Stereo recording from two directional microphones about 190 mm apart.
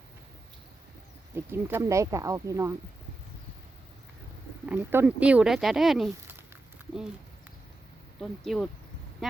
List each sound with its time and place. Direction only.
1.4 s speech: 10° right (ahead or behind)
4.6 s speech: 10° right (ahead or behind)
8.2 s speech: centre (ahead or behind)